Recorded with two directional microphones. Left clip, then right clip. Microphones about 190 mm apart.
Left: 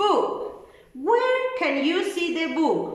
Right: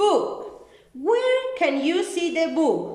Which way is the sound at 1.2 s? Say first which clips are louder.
Right 1 dB; 15° right (ahead or behind).